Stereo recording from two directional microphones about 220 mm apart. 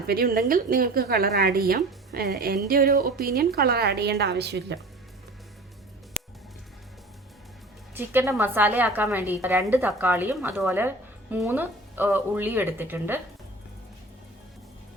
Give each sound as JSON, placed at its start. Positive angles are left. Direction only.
{"t": 0.1, "sound": "a woman's voice", "side_deg": -40}
{"t": 7.9, "sound": "a woman's voice", "side_deg": -10}